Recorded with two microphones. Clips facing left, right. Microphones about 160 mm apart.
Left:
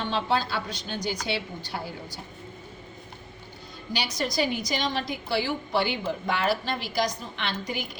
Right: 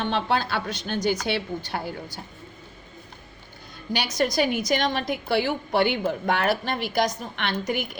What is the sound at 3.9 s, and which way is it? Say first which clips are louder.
A woman's voice: right 5 dB; 50° right (ahead or behind).